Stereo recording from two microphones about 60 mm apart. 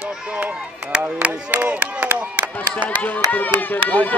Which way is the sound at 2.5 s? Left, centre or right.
Left.